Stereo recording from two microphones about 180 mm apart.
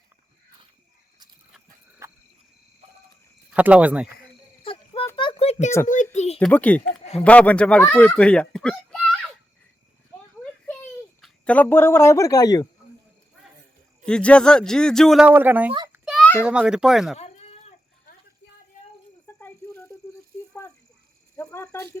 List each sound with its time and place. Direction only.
2.0 s cricket: 15° right (ahead or behind)
3.5 s speech: 10° right (ahead or behind)
4.6 s a sound: 30° left (ahead or behind)
6.4 s speech: 10° left (ahead or behind)
11.2 s speech: 5° left (ahead or behind)
14.0 s a man's voice: 5° left (ahead or behind)
15.3 s speech: 10° right (ahead or behind)
16.1 s a sound: 10° left (ahead or behind)
16.4 s a man's voice: 5° right (ahead or behind)
17.2 s cat: 35° left (ahead or behind)
19.4 s snake: 10° left (ahead or behind)
21.3 s speech: 15° left (ahead or behind)